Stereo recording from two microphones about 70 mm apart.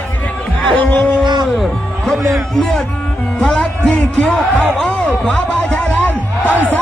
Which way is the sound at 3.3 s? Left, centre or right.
Centre.